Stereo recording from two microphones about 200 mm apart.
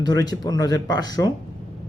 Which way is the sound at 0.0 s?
20° left (ahead or behind).